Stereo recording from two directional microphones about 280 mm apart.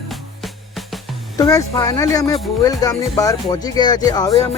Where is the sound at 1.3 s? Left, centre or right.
Centre.